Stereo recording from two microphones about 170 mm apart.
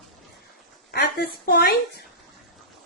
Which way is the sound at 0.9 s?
70° left (ahead or behind).